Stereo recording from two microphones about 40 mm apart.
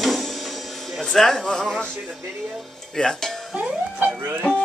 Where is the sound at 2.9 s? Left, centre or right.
Centre.